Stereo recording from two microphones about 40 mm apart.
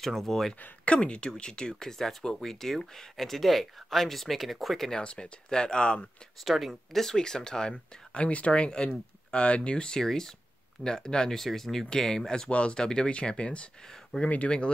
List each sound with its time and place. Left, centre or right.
0.0 s speech: centre
0.8 s speech: left
1.8 s speech: centre
5.0 s speech: left
6.4 s speech: centre
6.7 s speech: centre
7.9 s speech: left
9.9 s speech: centre
11.3 s speech: centre
12.4 s speech: left
13.8 s speech: centre
14.2 s speech: left